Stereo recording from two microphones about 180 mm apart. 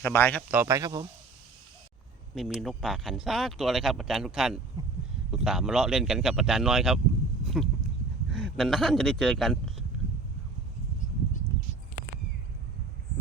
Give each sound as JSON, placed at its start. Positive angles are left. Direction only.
{"t": 0.0, "sound": "a man's voice", "side_deg": 10}
{"t": 0.5, "sound": "speech", "side_deg": -15}
{"t": 2.3, "sound": "speech", "side_deg": 0}
{"t": 7.4, "sound": "a sound", "side_deg": 0}
{"t": 8.3, "sound": "speech", "side_deg": 0}